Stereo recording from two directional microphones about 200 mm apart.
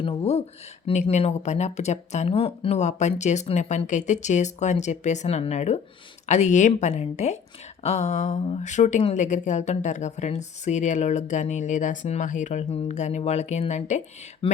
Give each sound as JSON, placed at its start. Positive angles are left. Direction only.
{"t": 0.0, "sound": "a woman's voice", "side_deg": 30}